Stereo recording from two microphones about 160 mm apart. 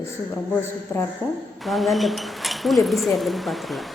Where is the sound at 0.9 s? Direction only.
10° left (ahead or behind).